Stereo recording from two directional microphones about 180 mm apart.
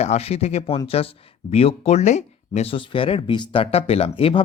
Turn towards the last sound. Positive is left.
turn(degrees=30)  # may be behind; listen again after turning